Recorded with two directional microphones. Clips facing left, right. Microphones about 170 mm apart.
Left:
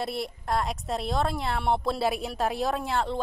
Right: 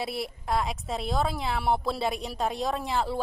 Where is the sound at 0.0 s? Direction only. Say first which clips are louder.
Left 1 dB; centre (ahead or behind).